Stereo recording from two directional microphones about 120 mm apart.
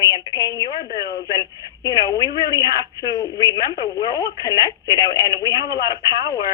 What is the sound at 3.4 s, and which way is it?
Speech, 30° left (ahead or behind).